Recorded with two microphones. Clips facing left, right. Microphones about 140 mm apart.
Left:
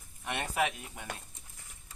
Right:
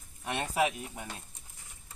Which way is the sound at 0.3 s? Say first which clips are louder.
Right 2 dB; 25° right (ahead or behind).